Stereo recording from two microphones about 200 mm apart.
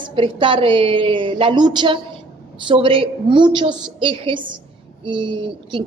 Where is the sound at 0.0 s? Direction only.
25° right (ahead or behind).